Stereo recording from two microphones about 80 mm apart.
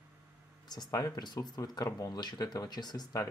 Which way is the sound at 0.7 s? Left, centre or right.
Left.